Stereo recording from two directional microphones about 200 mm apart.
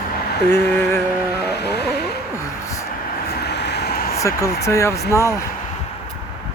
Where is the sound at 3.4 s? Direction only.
55° left (ahead or behind).